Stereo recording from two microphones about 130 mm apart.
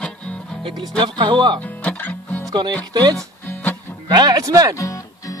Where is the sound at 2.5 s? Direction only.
35° right (ahead or behind).